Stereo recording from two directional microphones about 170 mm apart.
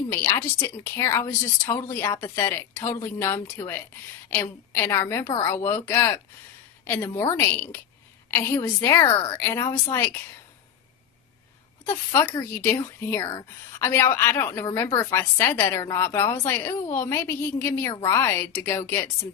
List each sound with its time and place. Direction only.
0.1 s a woman's voice: 15° left (ahead or behind)
11.9 s a woman's voice: 15° left (ahead or behind)